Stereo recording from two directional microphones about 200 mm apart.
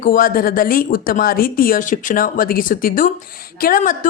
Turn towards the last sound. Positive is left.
turn(degrees=45)  # may be behind; listen again after turning